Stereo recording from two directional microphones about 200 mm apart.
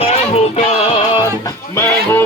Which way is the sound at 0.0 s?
30° left (ahead or behind).